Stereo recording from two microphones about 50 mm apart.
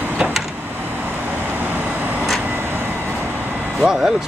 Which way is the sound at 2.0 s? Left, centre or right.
Right.